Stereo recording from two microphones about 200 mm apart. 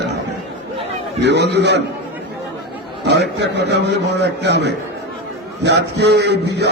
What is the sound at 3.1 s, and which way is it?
Speech, 60° right (ahead or behind).